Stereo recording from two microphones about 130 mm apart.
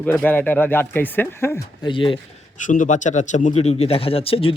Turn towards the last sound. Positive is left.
turn(degrees=45)  # may be behind; listen again after turning